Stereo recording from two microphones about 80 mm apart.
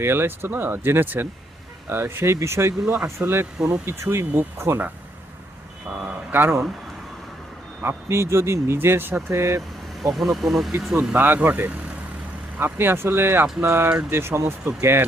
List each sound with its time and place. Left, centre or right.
0.0 s speech: right
6.1 s a sound: right
7.8 s speech: right
10.0 s speech: centre
11.1 s speech: right